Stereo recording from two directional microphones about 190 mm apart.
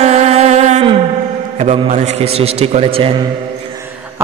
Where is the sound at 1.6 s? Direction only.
35° right (ahead or behind).